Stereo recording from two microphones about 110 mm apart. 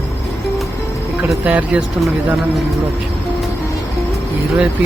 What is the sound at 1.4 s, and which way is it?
Speech, 10° right (ahead or behind).